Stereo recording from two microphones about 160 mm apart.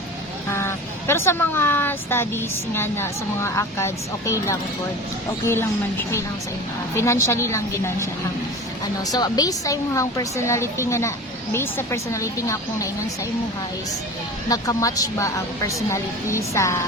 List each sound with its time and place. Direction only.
0.5 s speech: 15° left (ahead or behind)
6.9 s speech: 15° left (ahead or behind)
9.0 s a woman's voice: 25° left (ahead or behind)
14.5 s a woman's voice: 20° left (ahead or behind)